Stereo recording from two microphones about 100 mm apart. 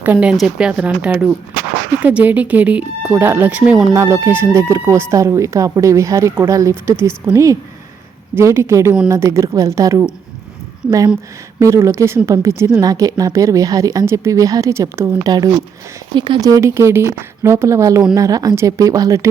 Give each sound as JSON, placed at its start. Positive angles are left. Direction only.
{"t": 0.0, "sound": "speech", "side_deg": -20}
{"t": 0.3, "sound": "speech", "side_deg": -5}
{"t": 3.6, "sound": "speech", "side_deg": -5}
{"t": 3.9, "sound": "speech", "side_deg": -30}
{"t": 8.4, "sound": "speech", "side_deg": -25}
{"t": 11.6, "sound": "speech", "side_deg": -25}
{"t": 15.2, "sound": "speech", "side_deg": -40}
{"t": 16.1, "sound": "speech", "side_deg": -50}
{"t": 16.4, "sound": "speech", "side_deg": -35}